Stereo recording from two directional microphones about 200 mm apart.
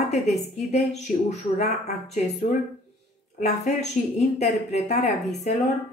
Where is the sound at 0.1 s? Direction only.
35° left (ahead or behind).